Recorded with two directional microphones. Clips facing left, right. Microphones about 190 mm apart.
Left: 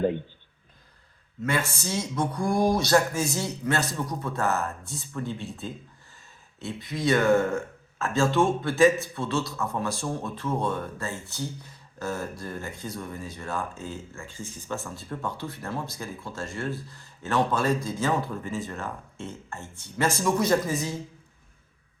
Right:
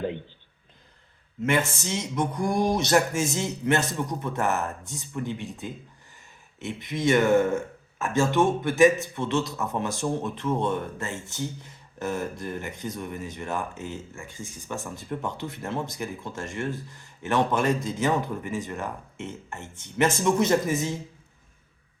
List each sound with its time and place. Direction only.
1.5 s speech: 20° right (ahead or behind)